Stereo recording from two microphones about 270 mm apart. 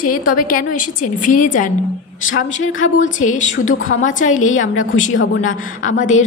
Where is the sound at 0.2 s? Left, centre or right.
Left.